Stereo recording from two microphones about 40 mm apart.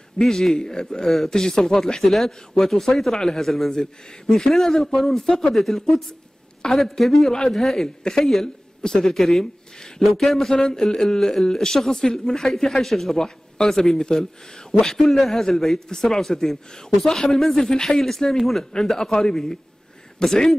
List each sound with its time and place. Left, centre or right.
0.3 s speech: centre
0.6 s speech: centre
0.8 s a man's voice: centre
1.6 s a man's voice: centre